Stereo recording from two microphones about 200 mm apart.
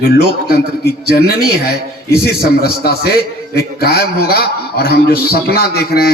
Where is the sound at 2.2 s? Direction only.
50° left (ahead or behind).